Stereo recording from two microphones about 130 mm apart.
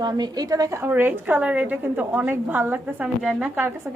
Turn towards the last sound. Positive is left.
turn(degrees=-10)  # may be behind; listen again after turning